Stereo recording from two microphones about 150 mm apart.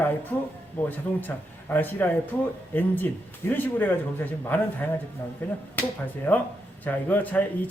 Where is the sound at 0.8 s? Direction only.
10° left (ahead or behind).